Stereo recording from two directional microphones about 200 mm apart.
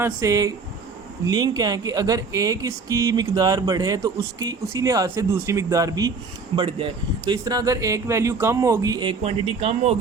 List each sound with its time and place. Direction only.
0.0 s speech: 15° right (ahead or behind); by 10.0 s 30° right (ahead or behind)